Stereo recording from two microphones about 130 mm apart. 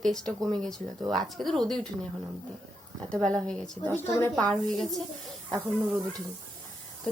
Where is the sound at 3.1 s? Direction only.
5° left (ahead or behind).